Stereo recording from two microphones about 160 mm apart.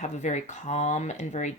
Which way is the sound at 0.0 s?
45° left (ahead or behind).